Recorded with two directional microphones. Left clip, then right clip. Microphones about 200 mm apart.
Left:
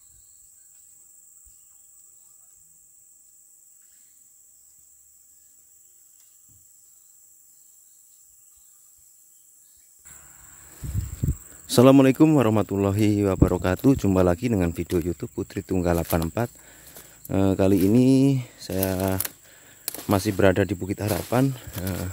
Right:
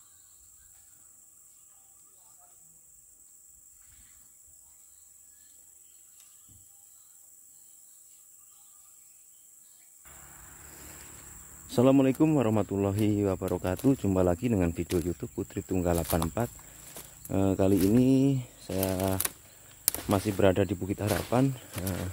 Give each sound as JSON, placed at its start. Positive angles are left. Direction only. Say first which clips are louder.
{"t": 11.6, "sound": "speech", "louder": "left 8 dB", "side_deg": 40}
{"t": 17.3, "sound": "speech", "louder": "left 5 dB", "side_deg": 35}